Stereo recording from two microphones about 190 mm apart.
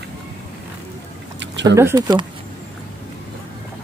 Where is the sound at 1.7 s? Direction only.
15° right (ahead or behind).